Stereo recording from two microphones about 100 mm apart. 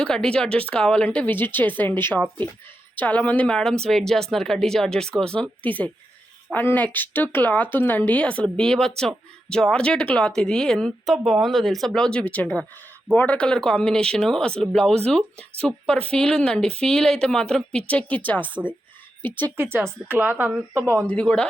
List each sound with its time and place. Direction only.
0.0 s speech: 5° left (ahead or behind)
16.0 s speech: 10° left (ahead or behind)
20.1 s speech: 20° right (ahead or behind)
21.1 s speech: 10° left (ahead or behind)